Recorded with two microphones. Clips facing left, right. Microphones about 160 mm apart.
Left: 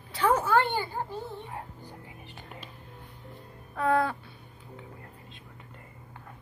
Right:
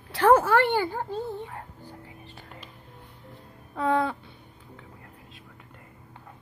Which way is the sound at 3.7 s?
25° right (ahead or behind).